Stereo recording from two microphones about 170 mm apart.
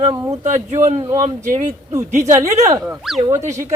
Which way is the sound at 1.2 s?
45° right (ahead or behind).